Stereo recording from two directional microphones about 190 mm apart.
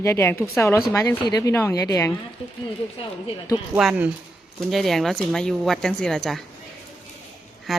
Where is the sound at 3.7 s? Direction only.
5° right (ahead or behind).